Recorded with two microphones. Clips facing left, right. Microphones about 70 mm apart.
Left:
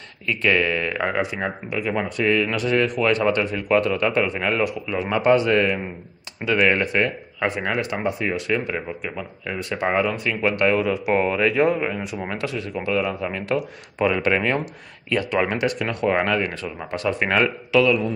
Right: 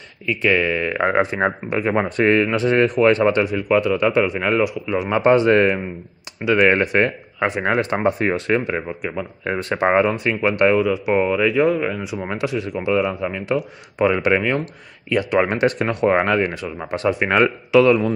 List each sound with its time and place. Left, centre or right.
0.3 s speech: centre
1.1 s speech: right
2.5 s speech: right
3.6 s speech: centre
9.4 s speech: right
10.8 s speech: centre
11.6 s speech: centre
12.3 s speech: centre
15.6 s speech: right